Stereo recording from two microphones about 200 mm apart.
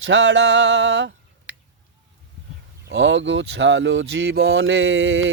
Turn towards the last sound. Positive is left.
turn(degrees=-80)